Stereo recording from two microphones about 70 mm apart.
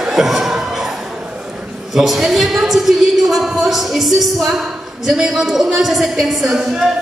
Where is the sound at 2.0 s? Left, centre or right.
Centre.